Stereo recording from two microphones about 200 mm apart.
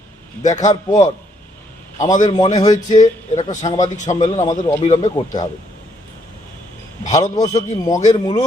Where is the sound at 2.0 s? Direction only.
40° left (ahead or behind).